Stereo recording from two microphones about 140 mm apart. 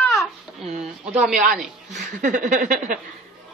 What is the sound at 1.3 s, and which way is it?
Speech, 70° right (ahead or behind).